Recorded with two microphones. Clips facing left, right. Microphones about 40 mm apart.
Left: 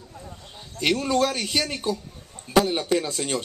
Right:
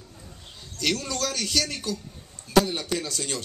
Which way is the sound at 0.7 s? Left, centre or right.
Left.